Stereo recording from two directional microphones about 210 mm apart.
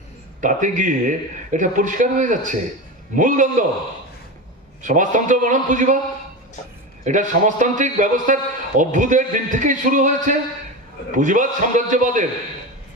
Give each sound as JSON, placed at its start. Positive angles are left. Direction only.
{"t": 0.4, "sound": "a man's voice", "side_deg": -35}
{"t": 4.8, "sound": "a man's voice", "side_deg": -35}
{"t": 7.0, "sound": "a man's voice", "side_deg": -35}